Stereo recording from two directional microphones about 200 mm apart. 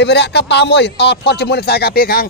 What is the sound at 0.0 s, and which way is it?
Speech, 55° left (ahead or behind).